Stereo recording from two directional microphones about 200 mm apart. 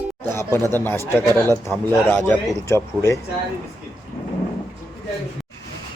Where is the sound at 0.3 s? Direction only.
15° left (ahead or behind).